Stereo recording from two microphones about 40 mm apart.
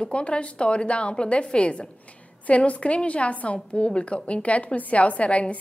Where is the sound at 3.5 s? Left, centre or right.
Left.